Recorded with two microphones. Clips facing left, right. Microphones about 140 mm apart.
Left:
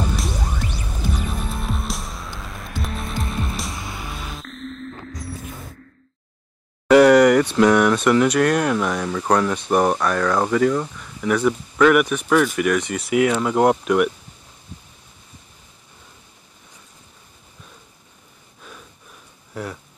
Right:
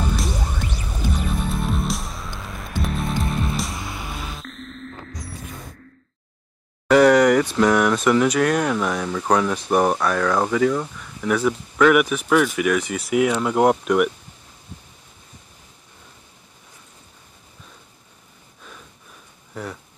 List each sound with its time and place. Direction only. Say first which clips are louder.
1.4 s music: right 3 dB; centre (ahead or behind)
6.9 s speech: left 2 dB; centre (ahead or behind)
19.5 s a sound: left 2 dB; centre (ahead or behind)